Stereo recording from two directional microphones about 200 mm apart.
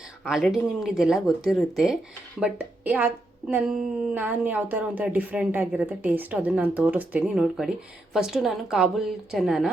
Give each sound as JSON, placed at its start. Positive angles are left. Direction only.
{"t": 0.3, "sound": "a woman's voice", "side_deg": 0}